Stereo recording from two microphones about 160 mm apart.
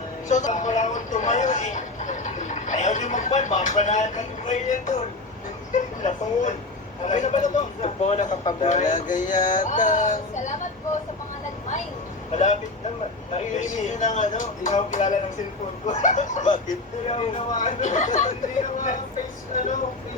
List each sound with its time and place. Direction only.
0.3 s a man's voice: 50° left (ahead or behind)
12.3 s a man's voice: 50° left (ahead or behind)
17.2 s speech: 35° left (ahead or behind)
17.6 s a man's voice: 50° left (ahead or behind)